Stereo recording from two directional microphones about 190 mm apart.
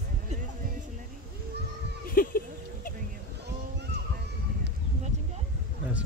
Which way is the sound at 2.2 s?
50° left (ahead or behind).